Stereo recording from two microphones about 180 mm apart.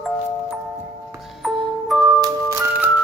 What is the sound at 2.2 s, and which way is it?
Music, 15° right (ahead or behind).